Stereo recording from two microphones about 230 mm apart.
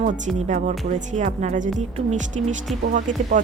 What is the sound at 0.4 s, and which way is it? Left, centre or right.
Speech, right.